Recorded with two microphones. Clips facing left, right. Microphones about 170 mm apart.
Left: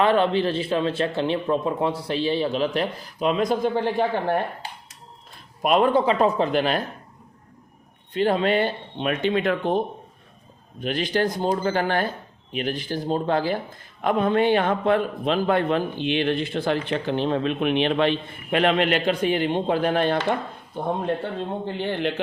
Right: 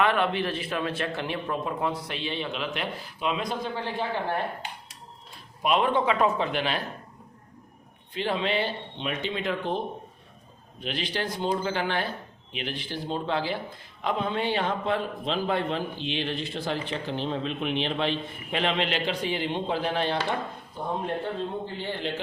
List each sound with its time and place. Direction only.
0.0 s speech: 30° left (ahead or behind); by 3.8 s 50° left (ahead or behind)
5.6 s speech: 45° left (ahead or behind)
8.1 s a man's voice: 45° left (ahead or behind)
20.8 s a man's voice: 65° left (ahead or behind)